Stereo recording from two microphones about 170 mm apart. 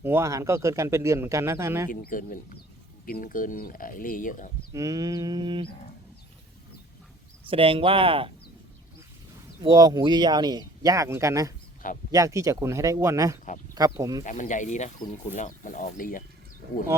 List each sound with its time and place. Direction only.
0.0 s speech: 15° right (ahead or behind)
1.9 s speech: 55° left (ahead or behind)
4.7 s speech: 20° right (ahead or behind)
7.5 s speech: 35° right (ahead or behind)
9.6 s speech: 25° right (ahead or behind)
14.3 s speech: 45° left (ahead or behind)